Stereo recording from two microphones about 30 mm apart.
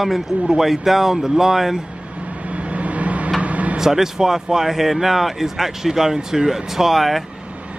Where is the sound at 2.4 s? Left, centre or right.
Right.